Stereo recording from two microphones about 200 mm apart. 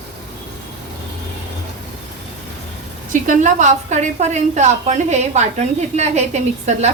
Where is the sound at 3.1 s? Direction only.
40° right (ahead or behind).